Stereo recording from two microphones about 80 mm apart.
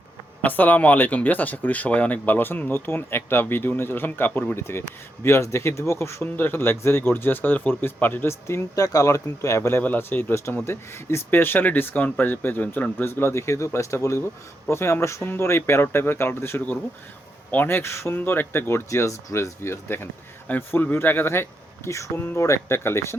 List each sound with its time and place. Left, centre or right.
0.4 s speech: left
6.2 s speech: left
8.7 s speech: left
21.8 s speech: left